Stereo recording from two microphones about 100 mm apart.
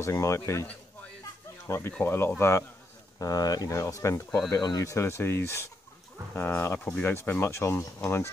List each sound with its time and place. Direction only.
0.0 s speech: 30° left (ahead or behind)
1.7 s speech: 20° left (ahead or behind)